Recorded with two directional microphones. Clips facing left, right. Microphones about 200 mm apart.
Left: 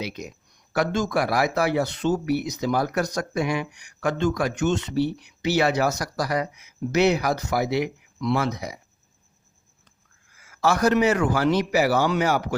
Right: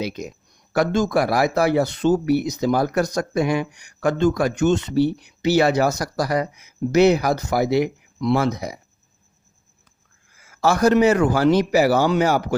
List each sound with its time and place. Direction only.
0.0 s speech: 40° right (ahead or behind)
10.5 s speech: 30° right (ahead or behind)